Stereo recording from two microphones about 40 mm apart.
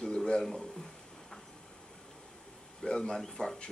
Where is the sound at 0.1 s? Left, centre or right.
Centre.